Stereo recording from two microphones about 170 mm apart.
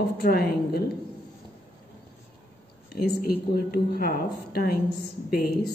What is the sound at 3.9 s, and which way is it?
Speech, 65° left (ahead or behind).